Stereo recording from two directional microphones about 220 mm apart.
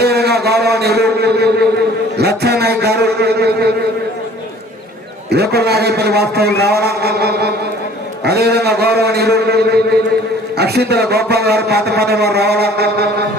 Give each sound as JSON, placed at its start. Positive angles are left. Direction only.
{"t": 0.0, "sound": "a sound", "side_deg": -45}
{"t": 2.1, "sound": "a man's voice", "side_deg": -45}
{"t": 5.3, "sound": "a man's voice", "side_deg": -45}